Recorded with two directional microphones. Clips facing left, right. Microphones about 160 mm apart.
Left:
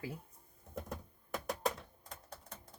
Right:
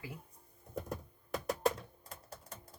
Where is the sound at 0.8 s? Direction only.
Centre (ahead or behind).